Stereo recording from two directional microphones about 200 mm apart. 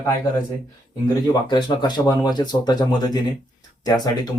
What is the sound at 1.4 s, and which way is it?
Speech, 20° left (ahead or behind).